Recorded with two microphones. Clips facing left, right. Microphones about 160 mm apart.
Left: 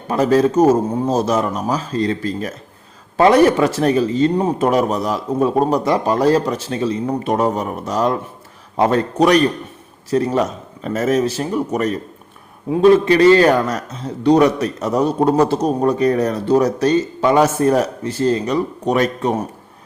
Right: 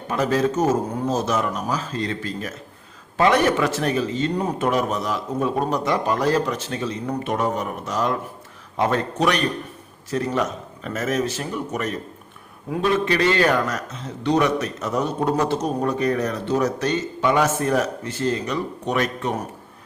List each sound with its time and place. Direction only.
0.1 s a man's voice: 35° left (ahead or behind)